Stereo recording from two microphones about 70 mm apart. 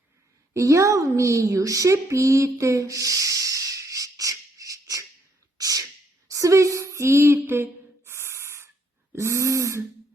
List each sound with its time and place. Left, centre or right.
0.5 s a child's voice: right
5.5 s sneeze: right
6.2 s female singing: right
7.4 s a sound: right